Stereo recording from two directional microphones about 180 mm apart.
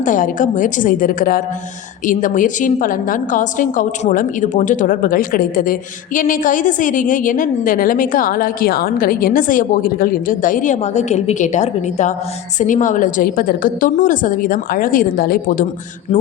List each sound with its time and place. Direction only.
0.0 s a woman's voice: 45° left (ahead or behind)